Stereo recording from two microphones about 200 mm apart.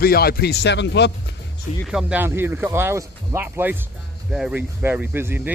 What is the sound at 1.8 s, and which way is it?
Speech, centre (ahead or behind).